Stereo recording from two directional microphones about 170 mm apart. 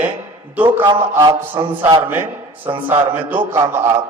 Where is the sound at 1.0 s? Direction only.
20° right (ahead or behind).